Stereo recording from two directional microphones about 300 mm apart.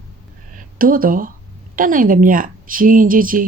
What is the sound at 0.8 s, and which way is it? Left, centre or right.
A woman's voice, right.